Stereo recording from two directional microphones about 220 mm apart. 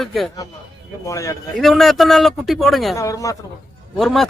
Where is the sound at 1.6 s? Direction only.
Centre (ahead or behind).